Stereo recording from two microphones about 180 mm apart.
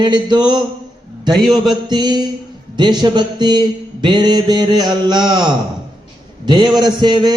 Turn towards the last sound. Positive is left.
turn(degrees=-25)  # may be behind; listen again after turning